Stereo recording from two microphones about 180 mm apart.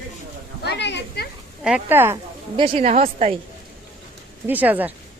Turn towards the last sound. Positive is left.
turn(degrees=-10)  # may be behind; listen again after turning